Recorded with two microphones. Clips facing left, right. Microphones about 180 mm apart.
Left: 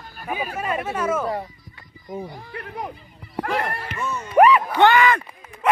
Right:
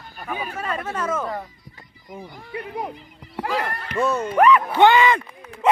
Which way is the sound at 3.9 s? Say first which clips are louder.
Right 7 dB; 75° right (ahead or behind).